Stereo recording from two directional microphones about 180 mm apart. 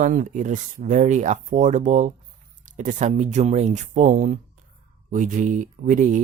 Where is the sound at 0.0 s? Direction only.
45° right (ahead or behind).